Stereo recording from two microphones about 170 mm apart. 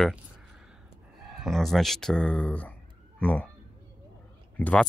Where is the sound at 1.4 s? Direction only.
Centre (ahead or behind).